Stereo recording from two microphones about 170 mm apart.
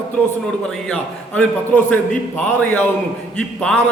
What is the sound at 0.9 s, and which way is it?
A man's voice, 5° left (ahead or behind).